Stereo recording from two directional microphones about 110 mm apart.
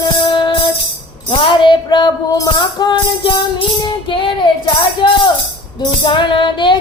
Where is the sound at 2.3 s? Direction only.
30° left (ahead or behind).